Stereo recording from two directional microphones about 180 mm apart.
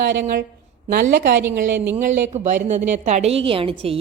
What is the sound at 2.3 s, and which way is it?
A woman's voice, 40° right (ahead or behind).